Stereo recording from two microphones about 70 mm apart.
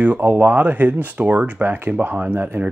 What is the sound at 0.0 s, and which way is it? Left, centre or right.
Speech, right.